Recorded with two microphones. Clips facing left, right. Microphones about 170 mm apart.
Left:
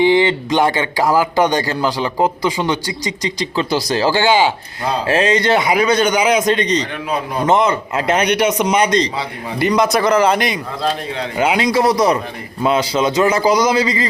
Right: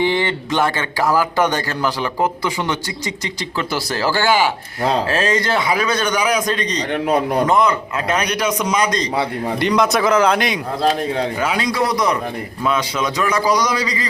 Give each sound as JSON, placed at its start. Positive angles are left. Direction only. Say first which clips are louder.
{"t": 0.0, "sound": "a man's voice", "louder": "left 6 dB", "side_deg": 15}
{"t": 9.6, "sound": "speech", "louder": "left 2 dB", "side_deg": 5}
{"t": 11.3, "sound": "a man's voice", "louder": "left 4 dB", "side_deg": 25}